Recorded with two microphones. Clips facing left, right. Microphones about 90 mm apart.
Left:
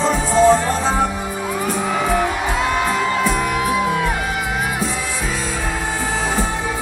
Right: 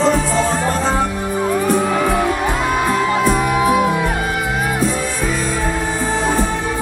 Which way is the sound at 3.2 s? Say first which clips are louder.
Right 3 dB; 5° right (ahead or behind).